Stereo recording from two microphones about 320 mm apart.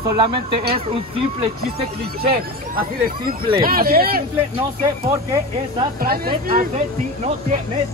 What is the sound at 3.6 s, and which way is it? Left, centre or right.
Speech, right.